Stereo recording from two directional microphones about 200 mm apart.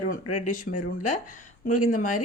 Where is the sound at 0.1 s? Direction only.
40° left (ahead or behind).